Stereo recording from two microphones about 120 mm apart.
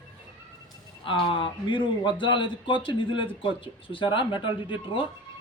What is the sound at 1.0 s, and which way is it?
A man's voice, 45° left (ahead or behind).